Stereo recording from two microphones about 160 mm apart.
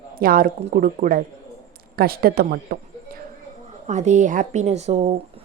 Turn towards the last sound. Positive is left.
turn(degrees=-45)  # may be behind; listen again after turning